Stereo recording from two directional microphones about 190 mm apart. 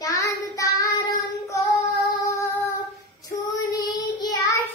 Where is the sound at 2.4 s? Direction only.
15° left (ahead or behind).